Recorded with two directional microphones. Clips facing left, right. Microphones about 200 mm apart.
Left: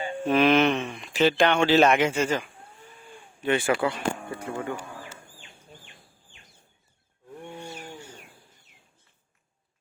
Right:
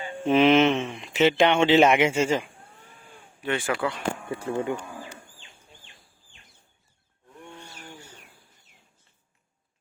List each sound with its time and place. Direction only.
0.3 s speech: 20° right (ahead or behind)
3.4 s speech: 5° left (ahead or behind)
3.7 s speech: 20° left (ahead or behind)
4.3 s speech: 30° right (ahead or behind)